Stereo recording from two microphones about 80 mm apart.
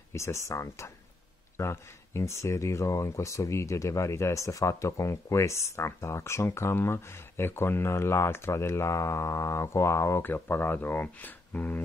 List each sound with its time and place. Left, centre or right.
0.1 s speech: left
10.2 s speech: left